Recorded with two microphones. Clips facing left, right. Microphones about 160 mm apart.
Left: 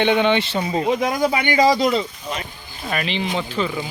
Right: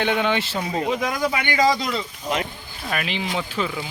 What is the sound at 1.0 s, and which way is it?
Speech, 25° left (ahead or behind).